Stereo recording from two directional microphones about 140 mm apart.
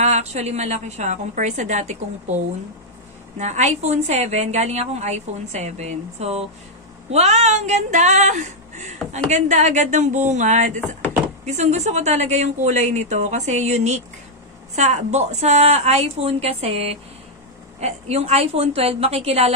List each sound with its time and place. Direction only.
0.0 s a woman's voice: 50° right (ahead or behind)